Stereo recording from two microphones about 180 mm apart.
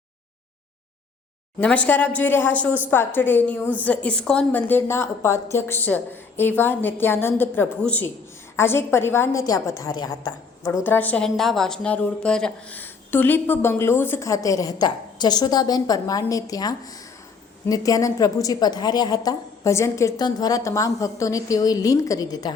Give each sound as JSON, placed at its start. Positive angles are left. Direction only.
{"t": 1.5, "sound": "a woman's voice", "side_deg": 5}